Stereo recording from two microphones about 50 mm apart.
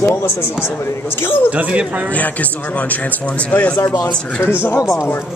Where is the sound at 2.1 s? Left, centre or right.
Left.